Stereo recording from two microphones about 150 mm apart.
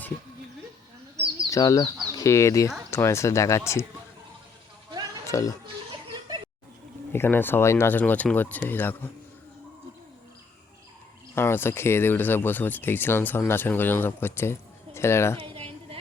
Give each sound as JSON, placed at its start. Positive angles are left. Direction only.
{"t": 1.5, "sound": "speech", "side_deg": 20}
{"t": 5.3, "sound": "speech", "side_deg": 25}
{"t": 7.1, "sound": "speech", "side_deg": 15}
{"t": 11.3, "sound": "speech", "side_deg": 15}
{"t": 15.4, "sound": "a sound", "side_deg": -40}